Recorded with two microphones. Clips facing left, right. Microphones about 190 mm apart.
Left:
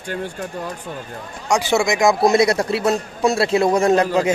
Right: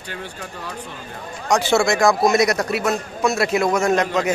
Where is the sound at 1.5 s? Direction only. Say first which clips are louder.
Even; 15° left (ahead or behind).